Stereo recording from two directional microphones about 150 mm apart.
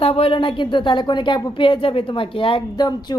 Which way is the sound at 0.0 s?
40° left (ahead or behind).